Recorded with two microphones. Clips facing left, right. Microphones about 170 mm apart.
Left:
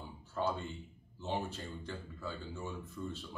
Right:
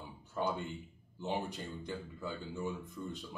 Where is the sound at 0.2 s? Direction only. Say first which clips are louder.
Even; 15° right (ahead or behind).